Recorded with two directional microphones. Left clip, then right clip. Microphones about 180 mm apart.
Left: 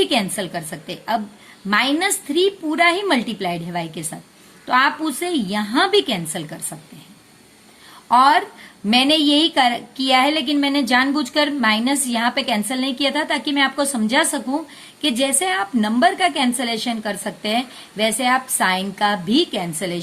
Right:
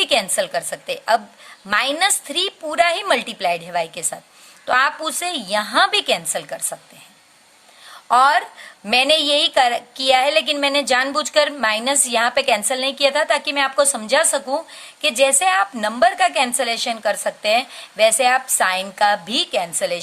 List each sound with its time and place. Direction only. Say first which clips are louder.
0.0 s a woman's voice: right 2 dB; 40° right (ahead or behind)
8.0 s a woman's voice: left 1 dB; 35° right (ahead or behind)